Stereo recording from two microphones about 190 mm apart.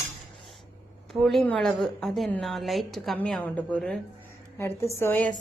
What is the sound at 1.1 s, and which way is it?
A woman's voice, centre (ahead or behind).